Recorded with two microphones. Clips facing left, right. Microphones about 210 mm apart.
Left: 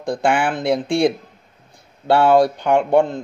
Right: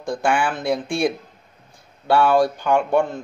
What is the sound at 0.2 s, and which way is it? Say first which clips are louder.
Speech: left 2 dB; 20° left (ahead or behind).